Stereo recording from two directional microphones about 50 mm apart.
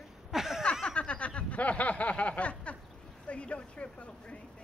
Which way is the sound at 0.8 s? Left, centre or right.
Left.